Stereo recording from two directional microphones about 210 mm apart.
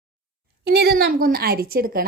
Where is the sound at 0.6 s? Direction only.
50° right (ahead or behind).